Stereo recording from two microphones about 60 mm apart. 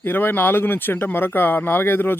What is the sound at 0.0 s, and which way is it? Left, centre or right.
Speech, left.